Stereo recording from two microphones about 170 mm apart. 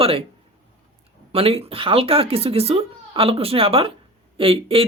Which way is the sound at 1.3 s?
35° right (ahead or behind).